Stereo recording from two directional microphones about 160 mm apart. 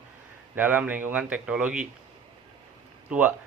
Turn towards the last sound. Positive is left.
turn(degrees=-10)  # may be behind; listen again after turning